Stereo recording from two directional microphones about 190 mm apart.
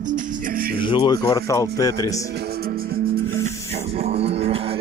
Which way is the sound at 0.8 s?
25° left (ahead or behind).